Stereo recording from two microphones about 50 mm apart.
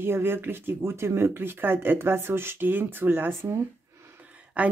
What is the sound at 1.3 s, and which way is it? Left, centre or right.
Speech, right.